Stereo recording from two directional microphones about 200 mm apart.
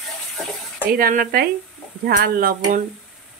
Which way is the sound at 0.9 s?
45° right (ahead or behind).